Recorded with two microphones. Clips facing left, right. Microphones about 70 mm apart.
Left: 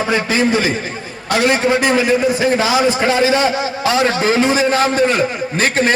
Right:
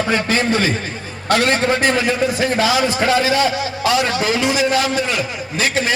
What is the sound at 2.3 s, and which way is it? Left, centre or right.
A man's voice, left.